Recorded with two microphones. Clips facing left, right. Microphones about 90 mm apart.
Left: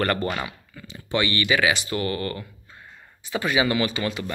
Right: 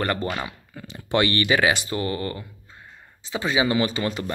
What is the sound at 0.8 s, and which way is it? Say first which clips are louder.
Speech: right 3 dB; 50° right (ahead or behind).